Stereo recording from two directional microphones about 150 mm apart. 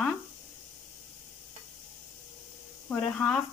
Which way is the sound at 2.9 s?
5° left (ahead or behind).